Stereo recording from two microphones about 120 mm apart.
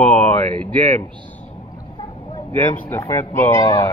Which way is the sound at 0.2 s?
10° left (ahead or behind).